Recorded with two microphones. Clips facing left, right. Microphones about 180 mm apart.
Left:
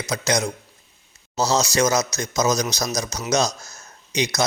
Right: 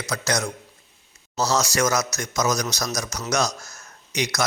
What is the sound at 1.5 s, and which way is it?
Speech, 20° left (ahead or behind).